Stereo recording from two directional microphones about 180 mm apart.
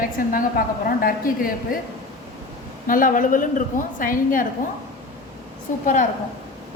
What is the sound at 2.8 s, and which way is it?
A woman's voice, 50° left (ahead or behind).